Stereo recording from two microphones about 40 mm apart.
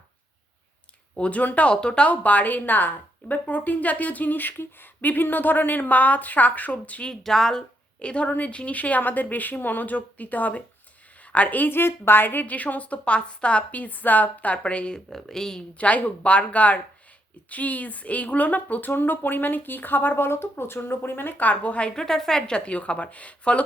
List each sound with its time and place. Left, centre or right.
1.1 s speech: left
1.7 s speech: left
2.0 s a woman's voice: left
4.9 s a woman's voice: left
7.2 s speech: centre
7.9 s a woman's voice: left
11.7 s a woman's voice: left
12.5 s a woman's voice: left
14.6 s speech: left
15.1 s speech: centre
15.8 s a woman's voice: left
21.4 s a woman's voice: left
21.9 s a woman's voice: centre; by 23.6 s left